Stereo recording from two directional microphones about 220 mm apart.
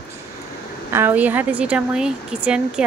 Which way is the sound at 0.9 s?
10° right (ahead or behind).